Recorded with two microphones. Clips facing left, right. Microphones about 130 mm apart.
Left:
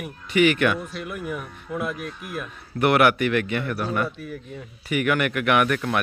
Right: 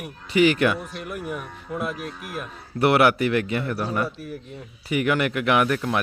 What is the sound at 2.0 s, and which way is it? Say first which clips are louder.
Speech: even; 40° right (ahead or behind).